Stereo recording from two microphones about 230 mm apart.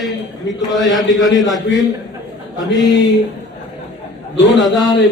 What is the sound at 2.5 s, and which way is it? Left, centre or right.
Speech, centre.